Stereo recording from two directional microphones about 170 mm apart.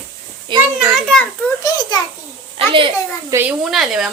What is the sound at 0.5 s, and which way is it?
Children playing, 30° right (ahead or behind).